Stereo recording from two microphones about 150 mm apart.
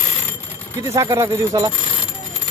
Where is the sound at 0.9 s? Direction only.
20° right (ahead or behind).